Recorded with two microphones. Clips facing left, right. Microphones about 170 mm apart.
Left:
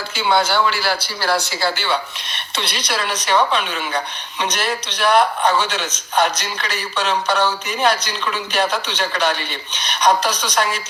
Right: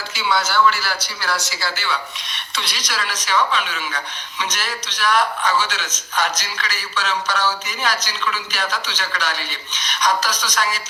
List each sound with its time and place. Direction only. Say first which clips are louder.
0.1 s speech: left 4 dB; 55° left (ahead or behind)
0.4 s a man's voice: even; 30° left (ahead or behind)
1.4 s speech: left 6 dB; 60° left (ahead or behind)